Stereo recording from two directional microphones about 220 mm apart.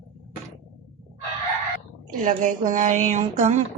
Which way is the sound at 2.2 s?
35° right (ahead or behind).